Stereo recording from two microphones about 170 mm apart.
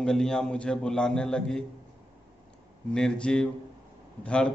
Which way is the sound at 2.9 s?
5° left (ahead or behind).